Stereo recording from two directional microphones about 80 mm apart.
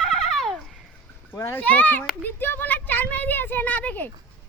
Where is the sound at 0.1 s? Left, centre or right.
Centre.